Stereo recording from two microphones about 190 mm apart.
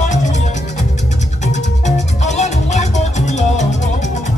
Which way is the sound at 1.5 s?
40° left (ahead or behind).